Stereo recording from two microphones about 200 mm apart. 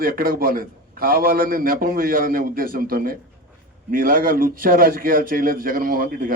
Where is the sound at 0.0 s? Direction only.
45° right (ahead or behind).